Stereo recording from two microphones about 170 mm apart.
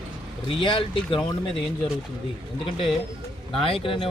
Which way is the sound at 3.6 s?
30° left (ahead or behind).